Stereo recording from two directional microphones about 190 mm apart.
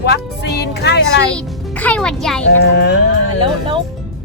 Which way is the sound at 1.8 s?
5° left (ahead or behind).